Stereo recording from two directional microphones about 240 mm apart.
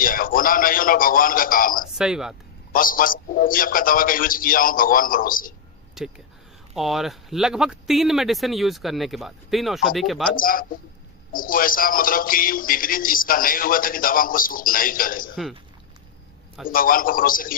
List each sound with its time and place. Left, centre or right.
0.0 s speech: left
2.0 s speech: centre
2.7 s speech: left
6.0 s speech: centre
10.3 s speech: left
16.6 s speech: left